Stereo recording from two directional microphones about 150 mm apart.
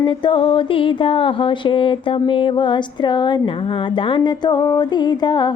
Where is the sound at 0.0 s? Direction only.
30° left (ahead or behind).